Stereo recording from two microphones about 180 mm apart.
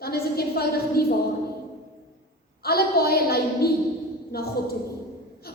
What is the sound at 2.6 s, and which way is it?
A woman's voice, 60° left (ahead or behind).